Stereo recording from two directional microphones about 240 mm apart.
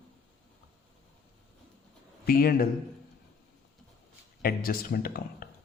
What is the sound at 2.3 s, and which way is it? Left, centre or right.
Speech, left.